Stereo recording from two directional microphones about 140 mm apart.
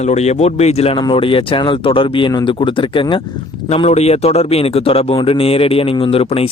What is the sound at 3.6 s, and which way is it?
Speech, 50° left (ahead or behind).